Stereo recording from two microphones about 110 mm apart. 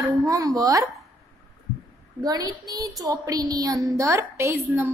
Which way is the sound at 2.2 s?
35° right (ahead or behind).